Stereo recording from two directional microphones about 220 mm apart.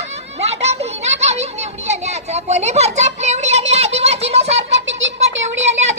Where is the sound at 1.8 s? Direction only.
30° right (ahead or behind).